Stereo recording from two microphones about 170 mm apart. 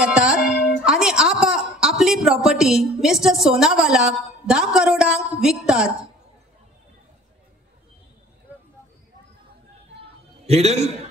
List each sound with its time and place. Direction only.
0.0 s a sound: 5° right (ahead or behind)
4.7 s a woman's voice: 5° right (ahead or behind)
10.4 s a man's voice: 40° right (ahead or behind)